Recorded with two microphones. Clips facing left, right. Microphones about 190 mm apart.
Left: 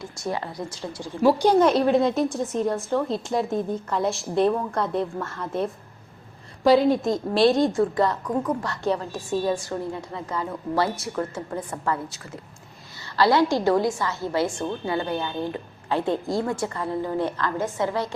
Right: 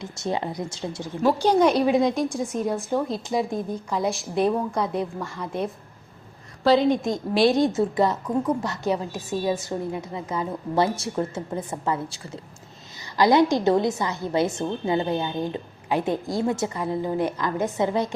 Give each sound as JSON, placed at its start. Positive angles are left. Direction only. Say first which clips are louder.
{"t": 0.0, "sound": "a woman's voice", "louder": "right 2 dB", "side_deg": -20}
{"t": 1.4, "sound": "a woman's voice", "louder": "right 2 dB", "side_deg": 10}
{"t": 2.6, "sound": "a woman's voice", "louder": "left 1 dB", "side_deg": -10}
{"t": 4.4, "sound": "a woman's voice", "louder": "right 2 dB", "side_deg": -15}
{"t": 4.8, "sound": "a woman's voice", "louder": "left 1 dB", "side_deg": 0}
{"t": 7.8, "sound": "a woman's voice", "louder": "even", "side_deg": -20}